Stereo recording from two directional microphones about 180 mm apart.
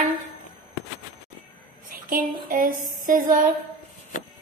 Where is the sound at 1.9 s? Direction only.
55° right (ahead or behind).